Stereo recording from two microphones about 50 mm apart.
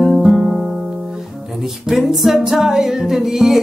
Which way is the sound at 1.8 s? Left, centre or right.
Centre.